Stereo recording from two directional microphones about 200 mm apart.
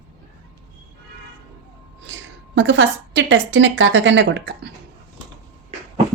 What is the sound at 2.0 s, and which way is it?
A woman's voice, 65° right (ahead or behind).